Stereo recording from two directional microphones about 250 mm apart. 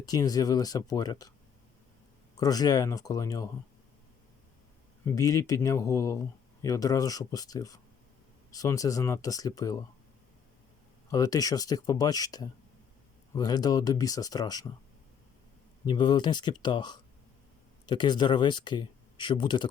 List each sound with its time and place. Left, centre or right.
0.0 s speech: centre
2.3 s speech: centre
5.0 s speech: centre
11.1 s speech: centre
15.9 s speech: centre